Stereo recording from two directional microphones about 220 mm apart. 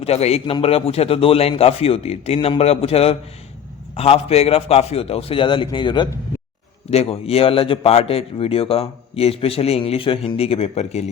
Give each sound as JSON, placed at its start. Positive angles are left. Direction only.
{"t": 0.0, "sound": "a man's voice", "side_deg": 30}